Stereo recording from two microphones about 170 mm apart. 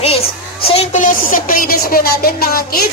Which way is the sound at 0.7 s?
40° left (ahead or behind).